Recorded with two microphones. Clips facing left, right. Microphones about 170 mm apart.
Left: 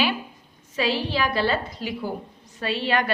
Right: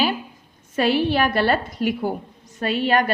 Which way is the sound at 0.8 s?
55° right (ahead or behind).